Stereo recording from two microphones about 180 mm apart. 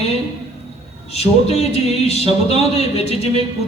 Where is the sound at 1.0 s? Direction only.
35° left (ahead or behind).